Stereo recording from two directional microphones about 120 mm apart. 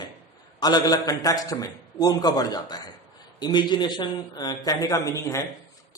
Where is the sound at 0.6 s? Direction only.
35° left (ahead or behind).